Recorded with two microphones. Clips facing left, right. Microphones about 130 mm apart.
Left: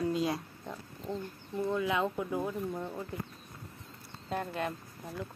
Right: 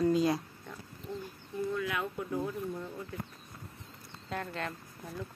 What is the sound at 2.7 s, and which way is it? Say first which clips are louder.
Speech: left 3 dB; 35° left (ahead or behind).